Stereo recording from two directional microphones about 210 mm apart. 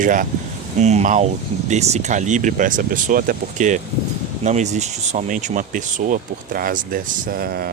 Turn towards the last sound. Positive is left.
turn(degrees=-45)  # may be behind; listen again after turning